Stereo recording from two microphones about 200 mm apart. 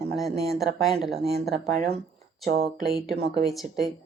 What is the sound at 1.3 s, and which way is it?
Speech, 50° right (ahead or behind).